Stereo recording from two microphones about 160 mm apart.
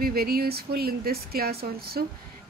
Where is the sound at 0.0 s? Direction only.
70° right (ahead or behind).